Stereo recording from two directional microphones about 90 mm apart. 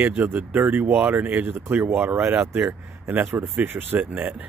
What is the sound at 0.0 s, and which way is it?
Speech, 20° right (ahead or behind).